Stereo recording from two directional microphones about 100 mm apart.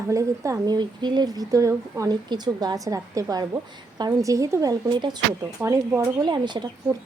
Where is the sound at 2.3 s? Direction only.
45° right (ahead or behind).